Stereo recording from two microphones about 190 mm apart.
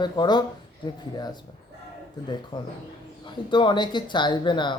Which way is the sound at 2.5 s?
20° left (ahead or behind).